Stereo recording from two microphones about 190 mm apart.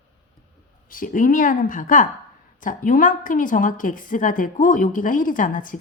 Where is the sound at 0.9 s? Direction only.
45° left (ahead or behind).